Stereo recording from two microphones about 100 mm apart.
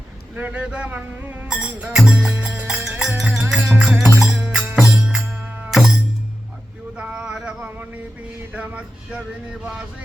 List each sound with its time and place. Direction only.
0.3 s speech: 15° right (ahead or behind)
2.4 s music: 10° right (ahead or behind)
6.9 s a sound: 10° right (ahead or behind)
8.5 s speech: 15° right (ahead or behind)